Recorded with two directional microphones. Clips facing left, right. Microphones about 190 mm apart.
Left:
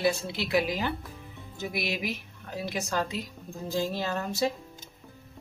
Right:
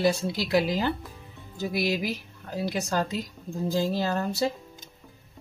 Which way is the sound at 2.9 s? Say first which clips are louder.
Right 3 dB; 40° right (ahead or behind).